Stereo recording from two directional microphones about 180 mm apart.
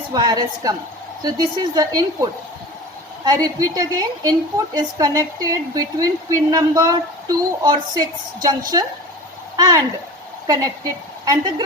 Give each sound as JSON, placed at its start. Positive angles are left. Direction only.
{"t": 0.1, "sound": "a woman's voice", "side_deg": -25}